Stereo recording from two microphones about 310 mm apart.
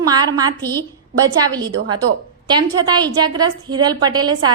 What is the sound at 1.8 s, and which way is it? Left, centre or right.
Speech, right.